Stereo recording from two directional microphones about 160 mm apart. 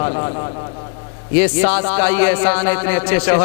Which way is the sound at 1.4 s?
15° left (ahead or behind).